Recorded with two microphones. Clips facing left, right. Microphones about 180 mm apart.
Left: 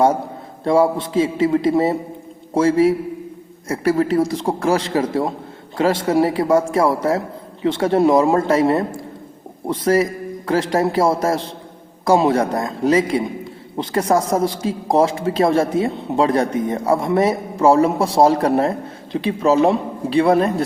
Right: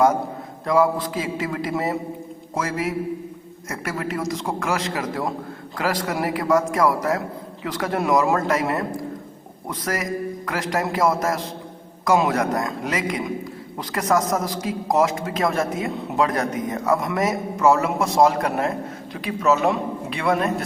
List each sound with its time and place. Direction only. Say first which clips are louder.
0.6 s a man's voice: left 4 dB; 30° left (ahead or behind)